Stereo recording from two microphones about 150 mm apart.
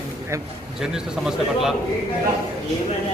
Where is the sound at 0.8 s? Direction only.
5° right (ahead or behind).